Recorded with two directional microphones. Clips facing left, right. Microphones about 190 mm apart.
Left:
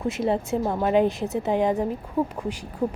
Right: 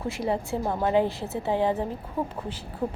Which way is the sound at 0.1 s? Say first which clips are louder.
Left 3 dB; 20° left (ahead or behind).